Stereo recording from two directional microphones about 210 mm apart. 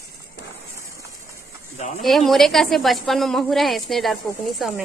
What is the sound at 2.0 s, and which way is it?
Speech, centre (ahead or behind).